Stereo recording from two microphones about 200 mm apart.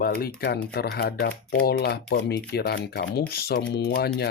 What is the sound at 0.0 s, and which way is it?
Speech, 50° left (ahead or behind).